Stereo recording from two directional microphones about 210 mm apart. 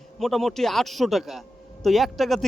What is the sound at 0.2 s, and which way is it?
A man's voice, centre (ahead or behind).